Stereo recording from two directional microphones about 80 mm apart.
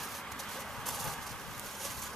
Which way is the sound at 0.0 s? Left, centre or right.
Centre.